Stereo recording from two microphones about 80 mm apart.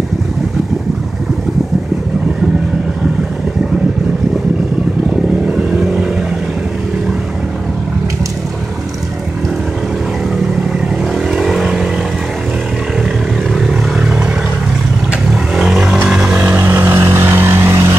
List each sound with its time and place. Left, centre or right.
5.5 s vehicle: centre
11.2 s vehicle: centre
13.6 s vehicle: centre
15.5 s vehicle: centre
16.3 s vehicle: right